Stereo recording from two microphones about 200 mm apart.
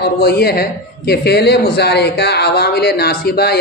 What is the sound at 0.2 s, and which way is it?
Speech, 50° left (ahead or behind).